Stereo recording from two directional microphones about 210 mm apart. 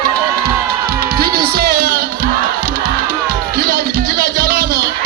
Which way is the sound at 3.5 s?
45° right (ahead or behind).